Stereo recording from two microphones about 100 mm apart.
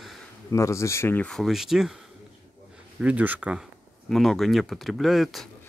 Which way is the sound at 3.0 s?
15° right (ahead or behind).